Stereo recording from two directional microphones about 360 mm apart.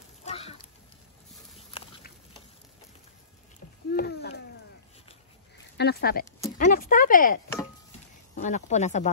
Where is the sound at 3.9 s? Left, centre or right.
Left.